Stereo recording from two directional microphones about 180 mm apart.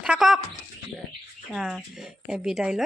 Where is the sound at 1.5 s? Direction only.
Centre (ahead or behind).